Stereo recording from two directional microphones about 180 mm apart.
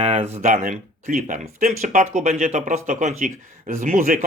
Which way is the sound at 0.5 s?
50° right (ahead or behind).